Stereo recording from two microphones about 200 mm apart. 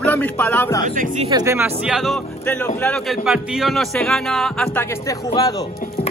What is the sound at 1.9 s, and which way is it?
A man's voice, centre (ahead or behind).